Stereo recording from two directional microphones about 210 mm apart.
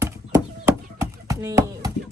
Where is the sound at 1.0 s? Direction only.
15° right (ahead or behind).